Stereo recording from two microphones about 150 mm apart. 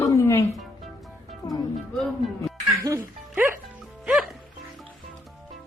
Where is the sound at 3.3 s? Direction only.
15° right (ahead or behind).